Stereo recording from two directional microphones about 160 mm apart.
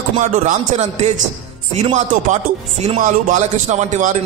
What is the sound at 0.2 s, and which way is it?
Speech, 45° right (ahead or behind).